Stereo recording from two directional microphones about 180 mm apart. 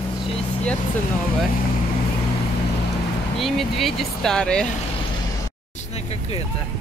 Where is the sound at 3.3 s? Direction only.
Centre (ahead or behind).